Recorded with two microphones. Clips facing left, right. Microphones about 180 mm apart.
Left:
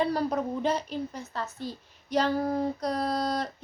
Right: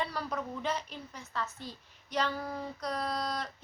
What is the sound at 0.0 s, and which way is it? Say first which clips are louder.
Female singing: left 9 dB; 40° left (ahead or behind).